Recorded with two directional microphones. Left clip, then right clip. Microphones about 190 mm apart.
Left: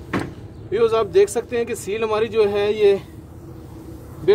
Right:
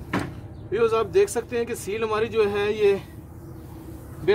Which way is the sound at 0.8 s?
55° right (ahead or behind).